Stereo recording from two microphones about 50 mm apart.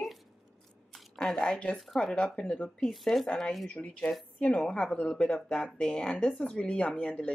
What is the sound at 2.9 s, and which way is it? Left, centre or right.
Speech, centre.